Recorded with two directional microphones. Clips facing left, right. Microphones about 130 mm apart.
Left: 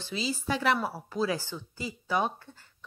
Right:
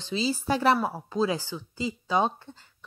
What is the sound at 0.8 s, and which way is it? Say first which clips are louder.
A woman's voice: right 3 dB; 20° right (ahead or behind).